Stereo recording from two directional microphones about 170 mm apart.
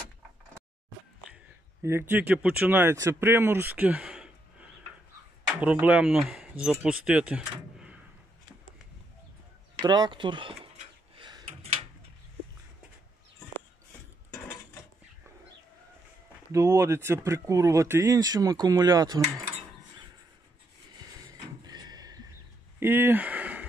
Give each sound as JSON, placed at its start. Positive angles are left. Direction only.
{"t": 1.2, "sound": "speech", "side_deg": -10}
{"t": 9.8, "sound": "speech", "side_deg": -25}
{"t": 11.1, "sound": "a sound", "side_deg": -30}
{"t": 16.5, "sound": "speech", "side_deg": -15}
{"t": 21.0, "sound": "a sound", "side_deg": -25}
{"t": 22.8, "sound": "speech", "side_deg": -15}